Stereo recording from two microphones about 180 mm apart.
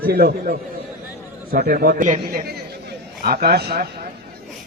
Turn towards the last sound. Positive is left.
turn(degrees=-60)  # may be behind; listen again after turning